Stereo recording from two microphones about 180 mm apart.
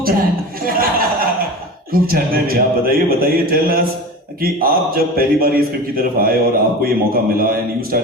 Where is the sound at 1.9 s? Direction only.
55° right (ahead or behind).